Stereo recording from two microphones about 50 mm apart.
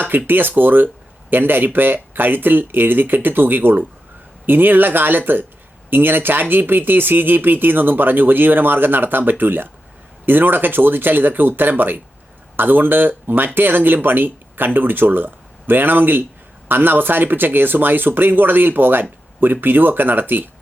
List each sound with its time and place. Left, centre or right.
0.0 s speech: right